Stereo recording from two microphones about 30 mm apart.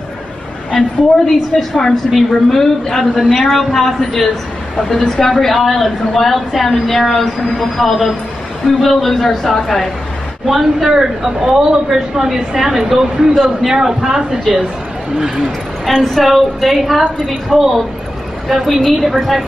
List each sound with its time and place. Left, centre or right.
0.7 s a woman's voice: centre
3.2 s a man's voice: centre
5.4 s a man's voice: centre
10.4 s a woman's voice: centre
10.9 s a woman's voice: right
15.8 s a man's voice: centre